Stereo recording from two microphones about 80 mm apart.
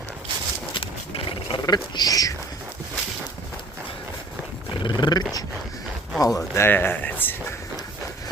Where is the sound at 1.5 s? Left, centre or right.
Left.